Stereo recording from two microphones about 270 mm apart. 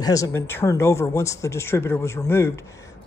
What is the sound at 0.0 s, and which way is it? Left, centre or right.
Speech, centre.